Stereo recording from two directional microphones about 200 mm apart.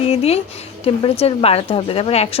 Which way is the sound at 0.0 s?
30° left (ahead or behind).